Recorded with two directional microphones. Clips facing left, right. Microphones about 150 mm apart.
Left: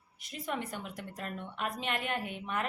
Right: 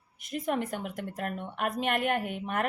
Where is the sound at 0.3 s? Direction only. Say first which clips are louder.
Right 7 dB; 50° right (ahead or behind).